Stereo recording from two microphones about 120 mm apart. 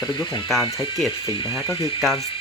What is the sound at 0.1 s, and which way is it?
Speech, 40° left (ahead or behind).